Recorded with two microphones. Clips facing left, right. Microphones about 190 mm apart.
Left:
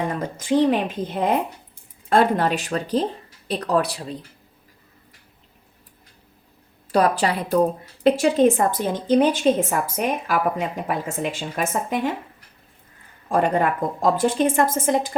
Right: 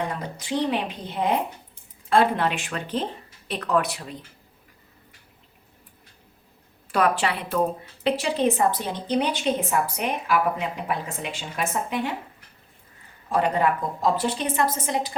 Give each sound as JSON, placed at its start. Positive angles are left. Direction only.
{"t": 0.2, "sound": "a woman's voice", "side_deg": 45}
{"t": 6.9, "sound": "a woman's voice", "side_deg": 40}
{"t": 13.2, "sound": "a woman's voice", "side_deg": 50}